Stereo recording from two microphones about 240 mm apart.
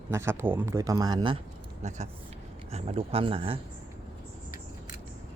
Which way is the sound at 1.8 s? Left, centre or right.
Right.